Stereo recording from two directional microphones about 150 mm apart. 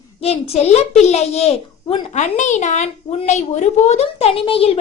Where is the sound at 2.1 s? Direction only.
55° left (ahead or behind).